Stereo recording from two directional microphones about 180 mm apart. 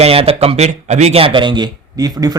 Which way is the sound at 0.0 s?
30° right (ahead or behind).